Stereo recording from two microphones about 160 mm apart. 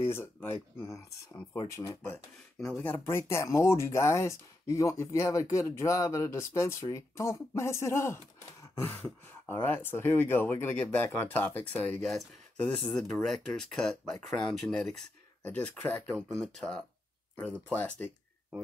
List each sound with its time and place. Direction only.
0.0 s speech: 15° left (ahead or behind)
2.6 s speech: 5° left (ahead or behind)